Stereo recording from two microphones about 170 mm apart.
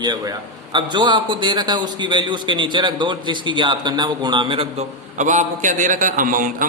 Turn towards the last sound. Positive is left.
turn(degrees=-50)  # may be behind; listen again after turning